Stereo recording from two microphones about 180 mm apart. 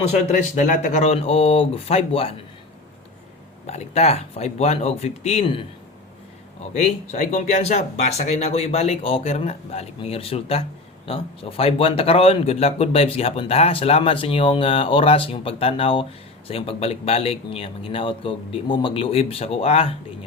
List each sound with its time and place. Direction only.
0.1 s speech: 40° left (ahead or behind)
3.7 s speech: 35° left (ahead or behind)
6.7 s speech: 40° left (ahead or behind)